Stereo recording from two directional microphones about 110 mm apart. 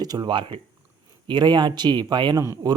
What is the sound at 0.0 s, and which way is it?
Speech, 40° right (ahead or behind).